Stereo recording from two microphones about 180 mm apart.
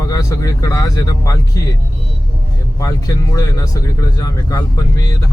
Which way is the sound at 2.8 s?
20° left (ahead or behind).